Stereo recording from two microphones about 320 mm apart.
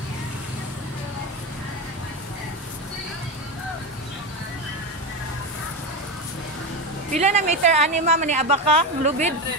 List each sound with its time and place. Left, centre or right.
7.1 s speech: right